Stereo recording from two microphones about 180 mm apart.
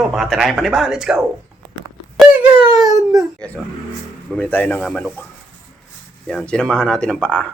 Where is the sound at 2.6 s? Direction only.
20° right (ahead or behind).